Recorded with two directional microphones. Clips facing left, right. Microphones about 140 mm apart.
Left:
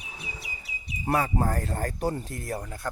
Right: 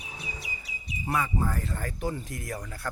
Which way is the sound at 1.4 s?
45° left (ahead or behind).